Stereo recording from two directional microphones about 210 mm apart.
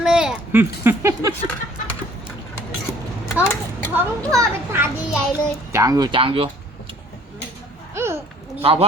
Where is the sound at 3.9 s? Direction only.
10° right (ahead or behind).